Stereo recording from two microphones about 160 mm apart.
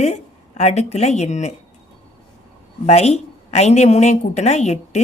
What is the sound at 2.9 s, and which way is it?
A woman's voice, 40° left (ahead or behind).